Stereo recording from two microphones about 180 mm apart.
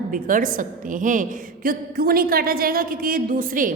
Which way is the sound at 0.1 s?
50° right (ahead or behind).